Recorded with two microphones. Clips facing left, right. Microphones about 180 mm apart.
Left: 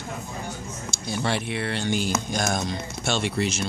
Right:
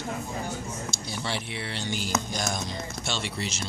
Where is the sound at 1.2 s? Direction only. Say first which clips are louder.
Left 7 dB; 55° left (ahead or behind).